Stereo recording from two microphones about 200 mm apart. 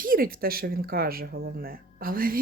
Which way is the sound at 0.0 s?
45° right (ahead or behind).